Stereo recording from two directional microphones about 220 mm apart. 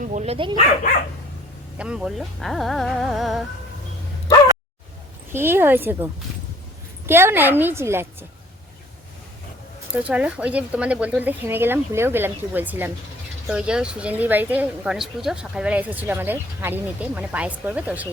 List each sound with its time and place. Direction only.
0.1 s speech: 30° right (ahead or behind)
1.8 s speech: 5° right (ahead or behind)
5.3 s a woman's voice: 10° right (ahead or behind)
7.1 s a woman's voice: 10° right (ahead or behind)
9.9 s a woman's voice: 5° right (ahead or behind)